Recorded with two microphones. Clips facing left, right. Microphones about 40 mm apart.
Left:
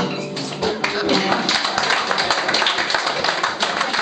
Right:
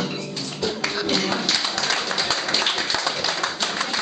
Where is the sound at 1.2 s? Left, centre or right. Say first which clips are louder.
Left 5 dB; left.